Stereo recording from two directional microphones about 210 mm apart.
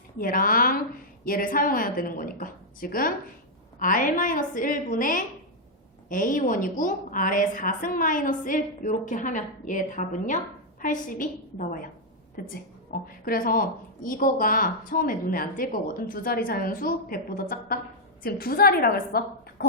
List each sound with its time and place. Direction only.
0.2 s a woman's voice: 45° left (ahead or behind)